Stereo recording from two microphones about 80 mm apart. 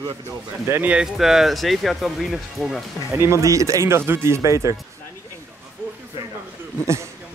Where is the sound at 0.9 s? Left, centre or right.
Centre.